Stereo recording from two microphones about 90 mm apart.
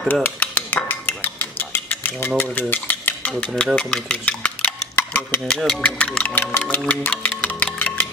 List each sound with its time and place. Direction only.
0.1 s music: 20° left (ahead or behind)
3.6 s speech: 10° left (ahead or behind)